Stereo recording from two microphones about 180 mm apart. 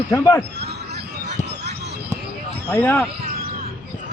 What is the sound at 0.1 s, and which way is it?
Speech, 15° left (ahead or behind).